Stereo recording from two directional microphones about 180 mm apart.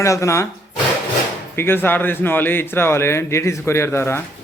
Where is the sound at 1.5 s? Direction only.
10° left (ahead or behind).